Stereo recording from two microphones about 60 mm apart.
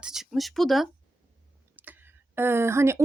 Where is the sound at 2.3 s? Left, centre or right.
Right.